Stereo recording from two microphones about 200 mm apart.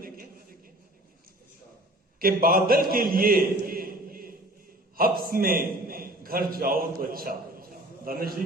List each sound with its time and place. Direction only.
2.1 s a man's voice: 45° right (ahead or behind)